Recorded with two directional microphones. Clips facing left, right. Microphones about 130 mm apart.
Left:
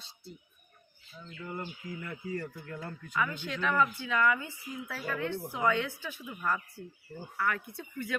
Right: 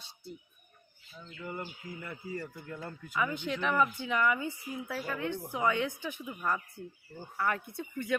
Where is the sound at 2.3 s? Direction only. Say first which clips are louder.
Left 2 dB; 5° right (ahead or behind); by 8.2 s 20° right (ahead or behind).